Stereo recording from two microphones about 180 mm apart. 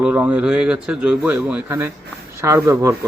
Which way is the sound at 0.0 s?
10° right (ahead or behind).